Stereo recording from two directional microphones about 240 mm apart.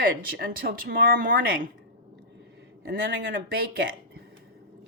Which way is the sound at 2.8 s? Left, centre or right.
Right.